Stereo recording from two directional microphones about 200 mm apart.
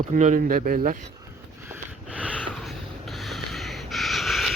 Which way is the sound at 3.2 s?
Centre (ahead or behind).